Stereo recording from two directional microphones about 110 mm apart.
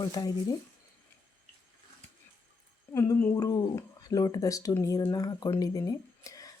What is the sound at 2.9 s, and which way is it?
Speech, 25° left (ahead or behind).